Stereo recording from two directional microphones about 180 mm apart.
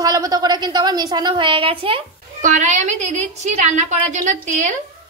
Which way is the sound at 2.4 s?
45° right (ahead or behind).